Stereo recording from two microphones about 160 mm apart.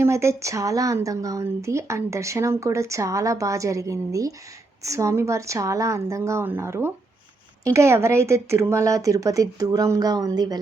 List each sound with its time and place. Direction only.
0.0 s speech: 15° right (ahead or behind)